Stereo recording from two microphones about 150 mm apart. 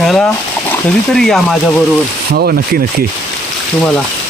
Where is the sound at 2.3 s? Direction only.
90° right.